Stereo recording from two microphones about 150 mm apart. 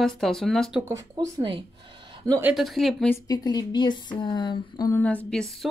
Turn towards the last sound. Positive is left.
turn(degrees=5)  # may be behind; listen again after turning